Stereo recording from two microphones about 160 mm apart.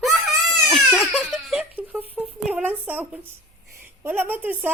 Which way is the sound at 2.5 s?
10° right (ahead or behind).